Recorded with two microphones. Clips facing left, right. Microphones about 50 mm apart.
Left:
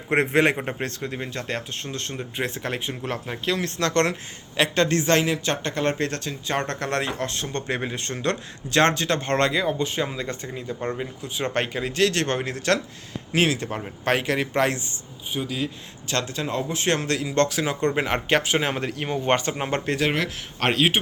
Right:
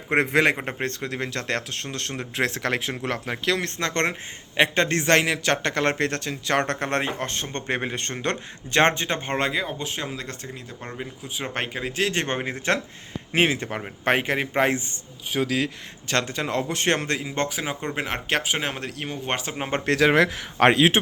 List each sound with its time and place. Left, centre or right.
0.1 s a man's voice: right
0.8 s a man's voice: right
1.1 s speech: right
3.0 s a man's voice: right
3.8 s a man's voice: right
6.7 s a man's voice: right
7.9 s a man's voice: right
8.1 s a man's voice: right
8.9 s a man's voice: right
9.3 s a man's voice: centre; by 14.8 s right
15.3 s speech: right
16.0 s a man's voice: right
16.9 s a man's voice: right
17.2 s speech: centre